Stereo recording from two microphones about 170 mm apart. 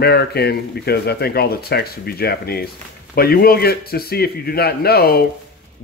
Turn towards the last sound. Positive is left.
turn(degrees=65)  # may be behind; listen again after turning